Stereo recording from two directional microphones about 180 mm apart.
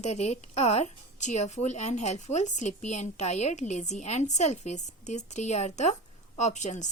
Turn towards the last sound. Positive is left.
turn(degrees=40)  # may be behind; listen again after turning